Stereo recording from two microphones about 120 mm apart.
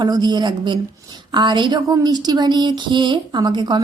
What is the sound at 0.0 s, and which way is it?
A woman's voice, 35° right (ahead or behind).